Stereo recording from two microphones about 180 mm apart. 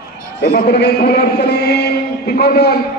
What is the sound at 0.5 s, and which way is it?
A man's voice, 60° left (ahead or behind).